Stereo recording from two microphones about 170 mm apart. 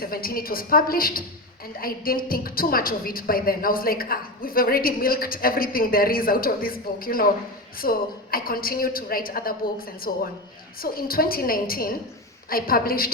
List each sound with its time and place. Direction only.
0.0 s a woman's voice: 60° left (ahead or behind)